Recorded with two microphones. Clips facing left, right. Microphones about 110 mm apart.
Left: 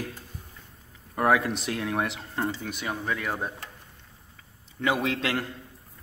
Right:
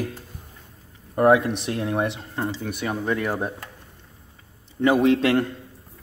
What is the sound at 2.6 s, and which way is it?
Speech, 5° right (ahead or behind).